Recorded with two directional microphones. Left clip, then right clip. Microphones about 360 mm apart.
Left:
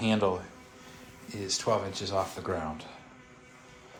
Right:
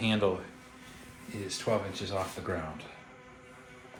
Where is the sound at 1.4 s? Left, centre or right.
Centre.